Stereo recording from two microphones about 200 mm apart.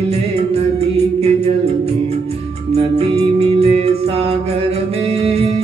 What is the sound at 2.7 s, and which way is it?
Music, 30° right (ahead or behind).